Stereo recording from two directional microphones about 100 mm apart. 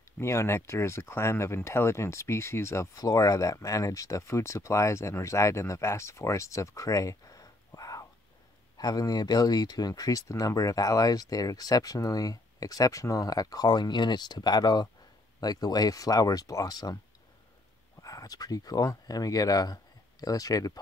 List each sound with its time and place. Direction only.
0.2 s speech: 25° left (ahead or behind)
18.0 s speech: 35° left (ahead or behind)